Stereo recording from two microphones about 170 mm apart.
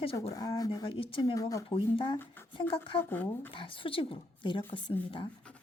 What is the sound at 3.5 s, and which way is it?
A woman's voice, 30° left (ahead or behind).